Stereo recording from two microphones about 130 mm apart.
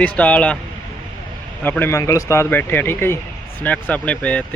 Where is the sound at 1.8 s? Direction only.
20° left (ahead or behind).